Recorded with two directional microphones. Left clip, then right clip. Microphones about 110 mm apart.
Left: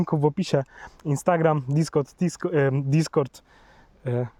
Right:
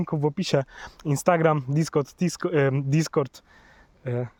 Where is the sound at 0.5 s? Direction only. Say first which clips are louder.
Even; 5° left (ahead or behind).